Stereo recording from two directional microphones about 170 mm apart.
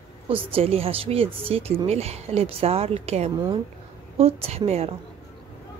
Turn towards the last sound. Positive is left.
turn(degrees=-35)  # may be behind; listen again after turning